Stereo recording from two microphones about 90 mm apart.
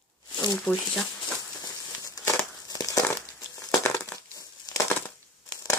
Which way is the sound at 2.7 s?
40° left (ahead or behind).